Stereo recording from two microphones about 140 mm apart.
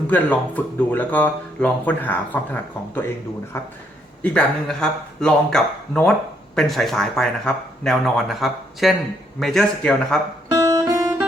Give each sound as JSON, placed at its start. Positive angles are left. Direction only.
{"t": 0.1, "sound": "speech", "side_deg": 10}
{"t": 4.2, "sound": "speech", "side_deg": 5}
{"t": 10.5, "sound": "guitar", "side_deg": -25}